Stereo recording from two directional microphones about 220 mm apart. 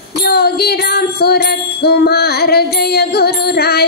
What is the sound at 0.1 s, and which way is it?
Music, 45° left (ahead or behind).